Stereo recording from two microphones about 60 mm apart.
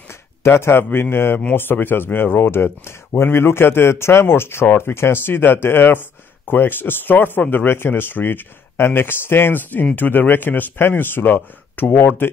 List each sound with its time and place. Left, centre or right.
0.4 s speech: left